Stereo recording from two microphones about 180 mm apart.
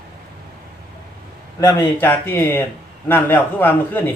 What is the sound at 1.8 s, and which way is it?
A man's voice, 10° left (ahead or behind).